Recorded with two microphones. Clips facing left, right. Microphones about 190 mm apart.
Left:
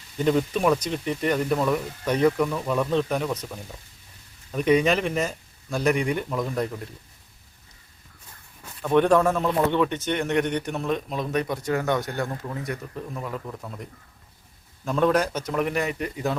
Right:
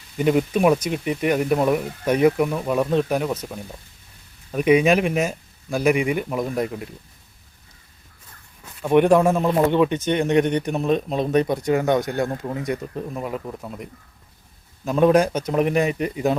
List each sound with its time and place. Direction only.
0.2 s speech: 10° right (ahead or behind)
4.5 s speech: 10° right (ahead or behind)
8.8 s speech: 15° right (ahead or behind)
14.8 s speech: 15° right (ahead or behind)